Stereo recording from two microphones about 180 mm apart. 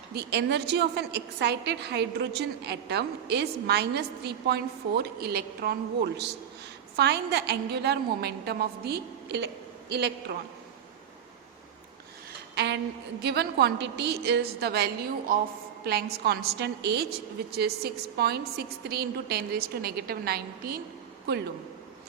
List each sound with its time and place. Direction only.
0.1 s a woman's voice: 65° right (ahead or behind)
6.9 s a woman's voice: 65° right (ahead or behind)
12.5 s a sound: 70° right (ahead or behind)
13.2 s a woman's voice: 65° right (ahead or behind)